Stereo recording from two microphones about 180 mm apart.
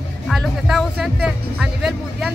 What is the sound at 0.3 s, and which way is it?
Speech, centre (ahead or behind).